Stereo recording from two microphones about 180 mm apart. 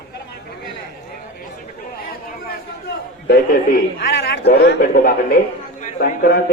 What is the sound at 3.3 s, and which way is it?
A man's voice, 65° left (ahead or behind).